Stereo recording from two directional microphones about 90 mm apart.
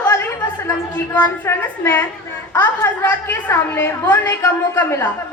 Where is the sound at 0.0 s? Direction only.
25° left (ahead or behind).